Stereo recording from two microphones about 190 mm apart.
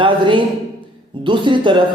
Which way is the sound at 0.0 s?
25° right (ahead or behind).